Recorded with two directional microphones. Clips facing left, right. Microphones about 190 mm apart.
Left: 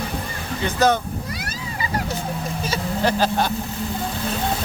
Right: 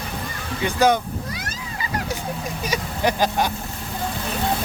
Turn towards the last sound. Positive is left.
turn(degrees=-15)  # may be behind; listen again after turning